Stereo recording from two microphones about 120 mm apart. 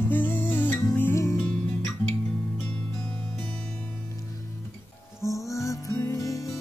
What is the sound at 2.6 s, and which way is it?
Music, 15° left (ahead or behind).